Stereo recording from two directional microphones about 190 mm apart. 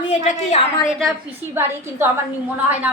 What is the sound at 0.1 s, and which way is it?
Speech, 35° left (ahead or behind).